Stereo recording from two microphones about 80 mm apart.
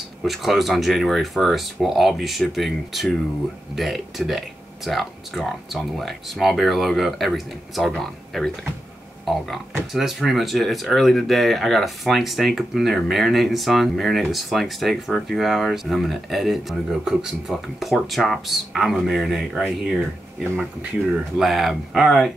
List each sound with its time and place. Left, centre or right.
0.2 s speech: centre
21.4 s speech: centre